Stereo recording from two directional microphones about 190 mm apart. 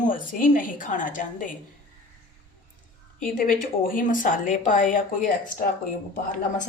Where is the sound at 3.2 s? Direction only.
45° left (ahead or behind).